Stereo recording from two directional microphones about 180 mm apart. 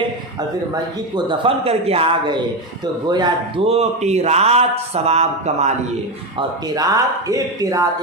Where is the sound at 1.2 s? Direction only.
30° right (ahead or behind).